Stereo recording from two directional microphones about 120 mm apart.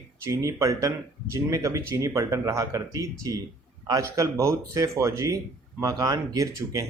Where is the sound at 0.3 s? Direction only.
30° right (ahead or behind).